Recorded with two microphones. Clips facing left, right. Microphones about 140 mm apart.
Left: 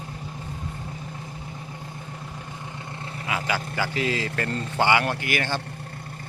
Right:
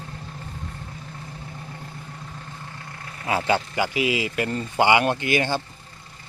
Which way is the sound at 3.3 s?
30° right (ahead or behind).